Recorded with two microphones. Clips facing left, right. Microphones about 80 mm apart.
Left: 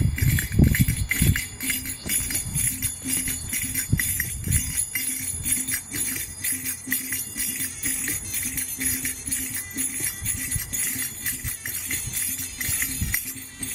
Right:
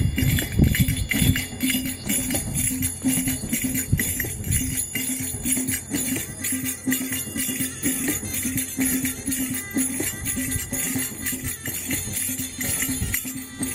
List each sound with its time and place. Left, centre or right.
0.1 s music: centre
2.0 s music: centre